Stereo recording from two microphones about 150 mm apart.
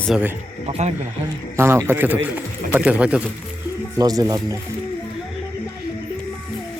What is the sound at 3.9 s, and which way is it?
Speech, 25° right (ahead or behind).